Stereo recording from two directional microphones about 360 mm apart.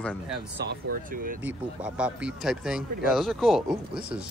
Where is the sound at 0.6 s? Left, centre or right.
Right.